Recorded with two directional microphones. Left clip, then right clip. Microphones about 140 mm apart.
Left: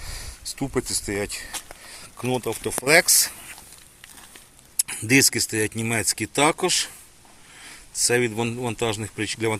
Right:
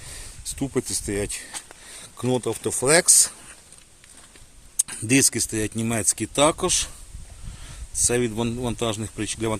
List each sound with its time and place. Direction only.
0.0 s a sound: 20° right (ahead or behind)
0.5 s speech: 30° right (ahead or behind)
2.0 s speech: 60° right (ahead or behind); by 3.1 s 40° right (ahead or behind)
4.9 s speech: 35° right (ahead or behind)
8.1 s speech: 45° right (ahead or behind)